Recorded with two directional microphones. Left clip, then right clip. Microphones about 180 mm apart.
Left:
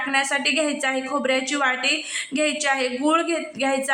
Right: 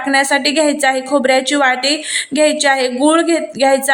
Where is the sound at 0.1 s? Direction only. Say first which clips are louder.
Right 9 dB; 30° right (ahead or behind).